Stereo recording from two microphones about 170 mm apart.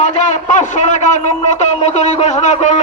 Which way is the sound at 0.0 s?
45° left (ahead or behind).